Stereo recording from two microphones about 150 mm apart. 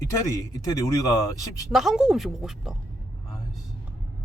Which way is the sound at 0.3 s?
25° left (ahead or behind).